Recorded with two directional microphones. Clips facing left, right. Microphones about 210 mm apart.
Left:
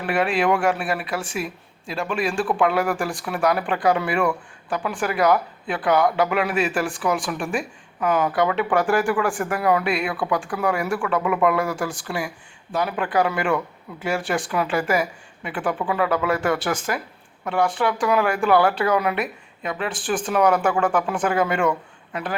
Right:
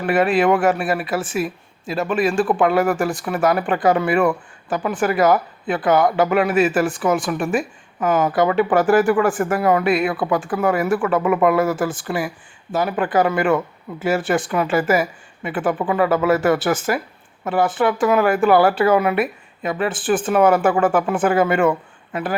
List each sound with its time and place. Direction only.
0.0 s speech: centre (ahead or behind)